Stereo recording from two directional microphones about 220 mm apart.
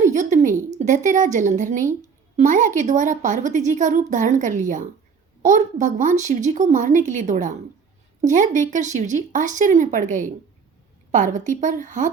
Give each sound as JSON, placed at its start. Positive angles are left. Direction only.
{"t": 0.0, "sound": "speech", "side_deg": -35}